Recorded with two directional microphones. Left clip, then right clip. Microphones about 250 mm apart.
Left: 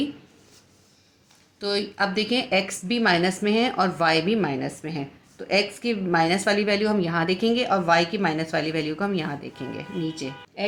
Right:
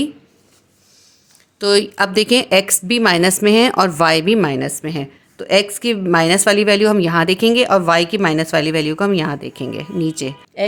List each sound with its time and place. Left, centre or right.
1.5 s speech: right